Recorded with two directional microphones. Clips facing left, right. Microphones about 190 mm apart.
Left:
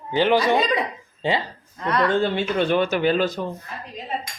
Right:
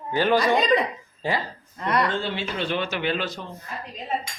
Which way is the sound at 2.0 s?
50° left (ahead or behind).